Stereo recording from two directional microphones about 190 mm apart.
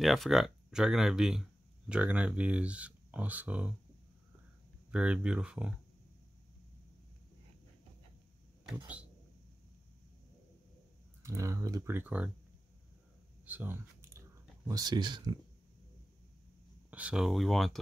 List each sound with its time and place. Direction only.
0.0 s speech: centre (ahead or behind)
4.9 s speech: 5° right (ahead or behind)
11.2 s speech: 15° right (ahead or behind)
13.5 s a sound: 10° right (ahead or behind)
14.7 s speech: 20° right (ahead or behind)
16.9 s speech: 5° right (ahead or behind)